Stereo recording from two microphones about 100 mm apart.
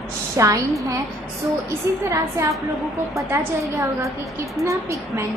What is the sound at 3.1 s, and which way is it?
A woman's voice, 30° right (ahead or behind).